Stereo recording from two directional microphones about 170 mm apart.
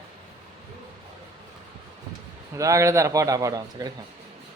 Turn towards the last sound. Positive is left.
turn(degrees=-20)  # may be behind; listen again after turning